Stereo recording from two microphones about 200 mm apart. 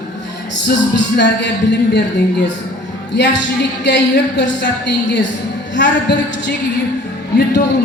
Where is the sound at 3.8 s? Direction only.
60° left (ahead or behind).